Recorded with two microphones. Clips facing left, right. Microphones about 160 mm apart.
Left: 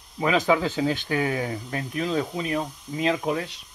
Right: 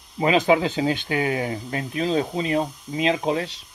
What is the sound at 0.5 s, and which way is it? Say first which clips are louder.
Speech: right 3 dB; 20° right (ahead or behind).